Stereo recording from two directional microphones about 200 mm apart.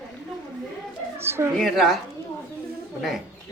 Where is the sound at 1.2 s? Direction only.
10° right (ahead or behind).